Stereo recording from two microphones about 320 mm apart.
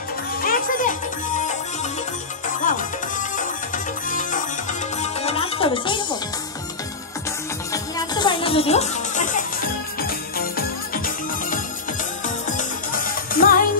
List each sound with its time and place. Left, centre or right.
0.4 s music: left
7.7 s music: centre; by 11.0 s left
12.4 s music: left